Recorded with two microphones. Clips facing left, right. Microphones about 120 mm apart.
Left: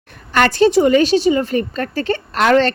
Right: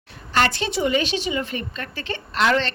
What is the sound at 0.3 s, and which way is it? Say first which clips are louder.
A woman's voice: left 9 dB; 45° left (ahead or behind).